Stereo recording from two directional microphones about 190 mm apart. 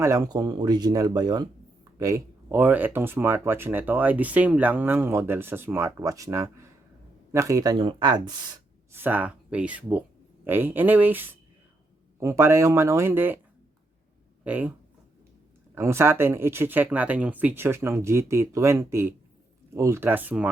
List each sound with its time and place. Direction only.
0.0 s speech: 20° right (ahead or behind)
14.4 s speech: 10° right (ahead or behind)
15.7 s speech: 15° right (ahead or behind)